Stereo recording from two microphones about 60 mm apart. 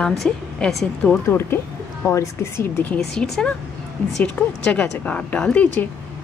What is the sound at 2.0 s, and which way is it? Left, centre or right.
Speech, left.